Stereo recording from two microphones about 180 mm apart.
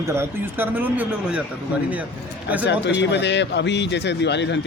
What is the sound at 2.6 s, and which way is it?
A man's voice, 75° left (ahead or behind).